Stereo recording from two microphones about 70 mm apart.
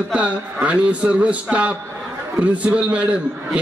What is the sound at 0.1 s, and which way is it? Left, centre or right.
A man's voice, centre.